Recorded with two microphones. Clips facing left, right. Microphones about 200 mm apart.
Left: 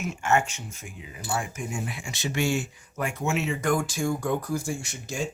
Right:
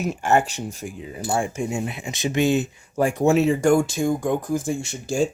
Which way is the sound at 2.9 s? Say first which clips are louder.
Right 10 dB; 35° right (ahead or behind).